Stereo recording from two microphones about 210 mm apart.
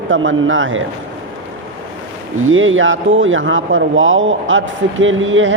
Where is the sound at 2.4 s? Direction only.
70° right (ahead or behind).